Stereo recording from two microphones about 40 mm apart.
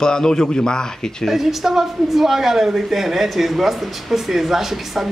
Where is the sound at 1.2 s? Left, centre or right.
Centre.